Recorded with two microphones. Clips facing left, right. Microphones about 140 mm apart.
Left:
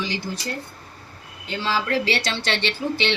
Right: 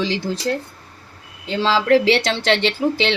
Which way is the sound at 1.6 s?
90° right.